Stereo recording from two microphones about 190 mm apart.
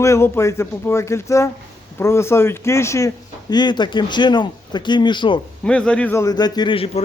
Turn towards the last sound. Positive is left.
turn(degrees=30)  # may be behind; listen again after turning